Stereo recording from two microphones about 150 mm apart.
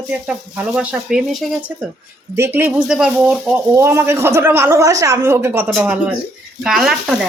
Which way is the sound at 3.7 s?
15° right (ahead or behind).